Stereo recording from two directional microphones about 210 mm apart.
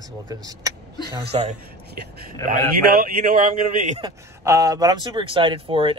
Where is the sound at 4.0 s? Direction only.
20° right (ahead or behind).